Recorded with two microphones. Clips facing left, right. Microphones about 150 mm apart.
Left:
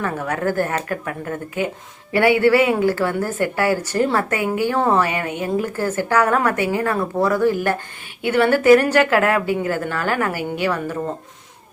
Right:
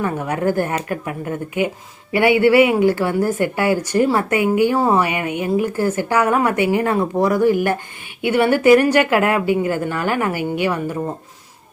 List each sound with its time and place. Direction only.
0.0 s a woman's voice: 15° right (ahead or behind)